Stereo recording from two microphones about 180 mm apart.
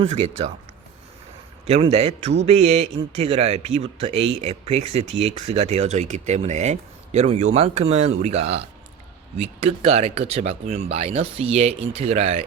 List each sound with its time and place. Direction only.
0.0 s speech: 35° right (ahead or behind)
1.6 s speech: 35° right (ahead or behind)
9.6 s speech: 35° right (ahead or behind)